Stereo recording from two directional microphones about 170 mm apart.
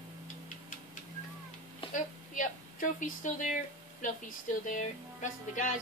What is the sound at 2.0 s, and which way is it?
Speech, 50° left (ahead or behind).